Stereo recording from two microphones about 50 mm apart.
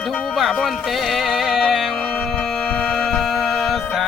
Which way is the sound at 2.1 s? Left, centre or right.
Centre.